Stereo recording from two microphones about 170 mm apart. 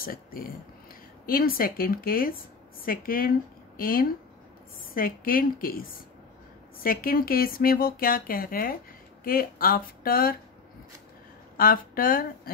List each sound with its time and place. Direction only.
0.0 s speech: 60° left (ahead or behind)
11.5 s speech: 55° left (ahead or behind)